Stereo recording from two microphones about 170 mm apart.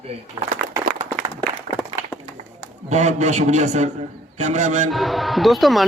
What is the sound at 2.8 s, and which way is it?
A man's voice, 45° right (ahead or behind).